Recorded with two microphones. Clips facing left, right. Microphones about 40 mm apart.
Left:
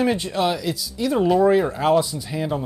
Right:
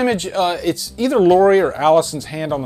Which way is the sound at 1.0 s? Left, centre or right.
Right.